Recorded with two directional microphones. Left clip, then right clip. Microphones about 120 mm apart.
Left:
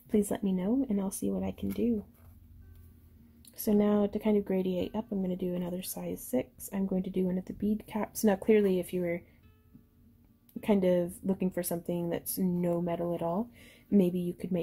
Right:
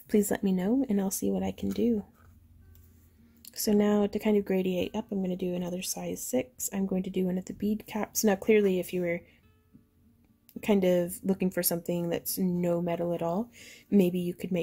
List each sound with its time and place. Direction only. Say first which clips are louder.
0.1 s speech: right 3 dB; 35° right (ahead or behind)
3.5 s speech: right 2 dB; 25° right (ahead or behind)
10.6 s speech: right 2 dB; 25° right (ahead or behind)